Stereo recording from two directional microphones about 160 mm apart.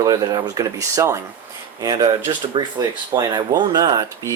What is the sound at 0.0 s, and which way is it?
Speech, 20° right (ahead or behind).